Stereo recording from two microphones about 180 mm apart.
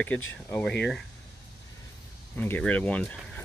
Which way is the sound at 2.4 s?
10° left (ahead or behind).